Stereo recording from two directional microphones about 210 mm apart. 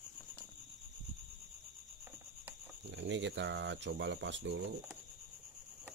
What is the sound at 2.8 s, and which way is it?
Speech, 60° right (ahead or behind).